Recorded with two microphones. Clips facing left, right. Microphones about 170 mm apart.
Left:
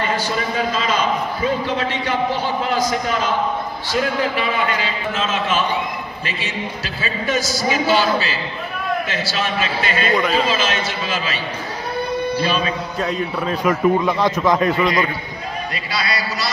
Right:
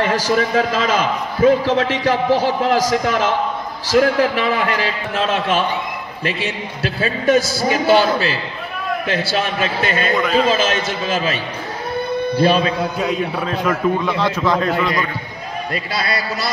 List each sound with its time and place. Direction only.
0.0 s a man's voice: 90° right; by 10.1 s 50° right (ahead or behind)
10.1 s a man's voice: centre (ahead or behind)
10.5 s a man's voice: 50° right (ahead or behind)
12.4 s a man's voice: 60° right (ahead or behind)
13.0 s a man's voice: 5° right (ahead or behind)
13.7 s a man's voice: 15° left (ahead or behind)
15.7 s a man's voice: 50° right (ahead or behind)